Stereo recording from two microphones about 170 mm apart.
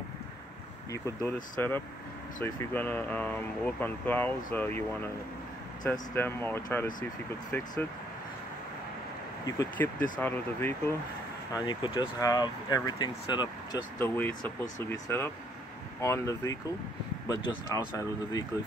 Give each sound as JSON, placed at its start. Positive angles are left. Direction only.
{"t": 0.9, "sound": "speech", "side_deg": 15}
{"t": 9.5, "sound": "speech", "side_deg": 20}
{"t": 11.5, "sound": "speech", "side_deg": 25}
{"t": 13.9, "sound": "speech", "side_deg": 10}